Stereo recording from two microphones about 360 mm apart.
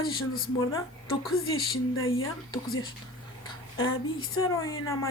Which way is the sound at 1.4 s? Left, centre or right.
Left.